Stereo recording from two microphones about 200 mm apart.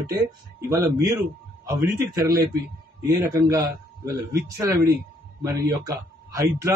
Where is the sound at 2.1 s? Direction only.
15° right (ahead or behind).